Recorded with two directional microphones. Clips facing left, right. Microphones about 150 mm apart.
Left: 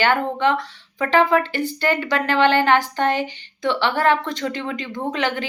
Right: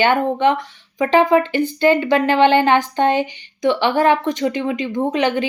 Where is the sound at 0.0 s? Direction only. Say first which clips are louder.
Right 4 dB; 20° right (ahead or behind).